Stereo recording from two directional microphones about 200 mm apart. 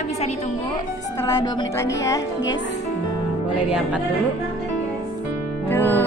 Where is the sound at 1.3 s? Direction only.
20° left (ahead or behind).